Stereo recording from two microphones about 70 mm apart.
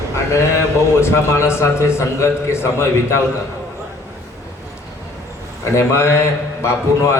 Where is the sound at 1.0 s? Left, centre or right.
Left.